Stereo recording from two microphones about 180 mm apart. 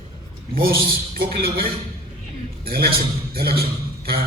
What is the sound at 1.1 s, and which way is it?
A man's voice, 55° right (ahead or behind).